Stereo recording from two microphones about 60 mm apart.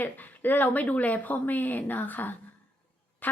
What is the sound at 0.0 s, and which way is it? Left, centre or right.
A woman's voice, left.